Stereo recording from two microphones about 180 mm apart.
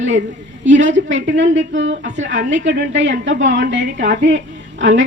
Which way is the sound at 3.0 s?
90° right.